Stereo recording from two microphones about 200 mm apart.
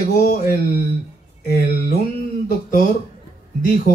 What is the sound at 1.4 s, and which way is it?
Speech, 50° left (ahead or behind).